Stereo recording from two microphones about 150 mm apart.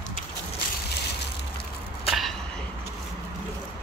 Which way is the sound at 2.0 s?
Centre (ahead or behind).